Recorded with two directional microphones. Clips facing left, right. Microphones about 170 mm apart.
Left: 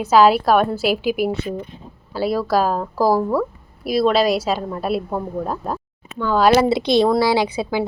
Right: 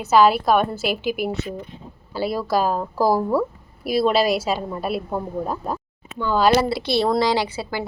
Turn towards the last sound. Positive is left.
turn(degrees=15)  # may be behind; listen again after turning